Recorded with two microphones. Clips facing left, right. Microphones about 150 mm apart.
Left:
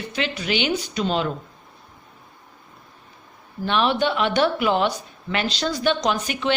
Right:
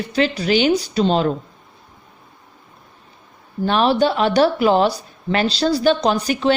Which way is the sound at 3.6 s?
40° right (ahead or behind).